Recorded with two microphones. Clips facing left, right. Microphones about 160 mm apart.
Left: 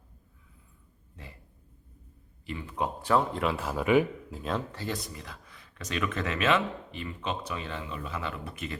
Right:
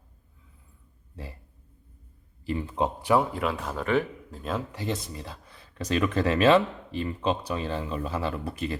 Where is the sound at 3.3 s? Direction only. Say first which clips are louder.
Even; centre (ahead or behind).